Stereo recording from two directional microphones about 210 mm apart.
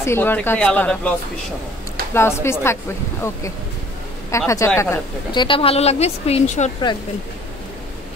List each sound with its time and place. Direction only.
0.0 s speech: 10° left (ahead or behind)
2.1 s a woman's voice: 10° left (ahead or behind); by 6.7 s 30° left (ahead or behind)